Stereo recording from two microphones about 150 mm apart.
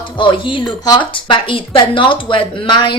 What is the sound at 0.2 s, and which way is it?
Speech, 35° left (ahead or behind).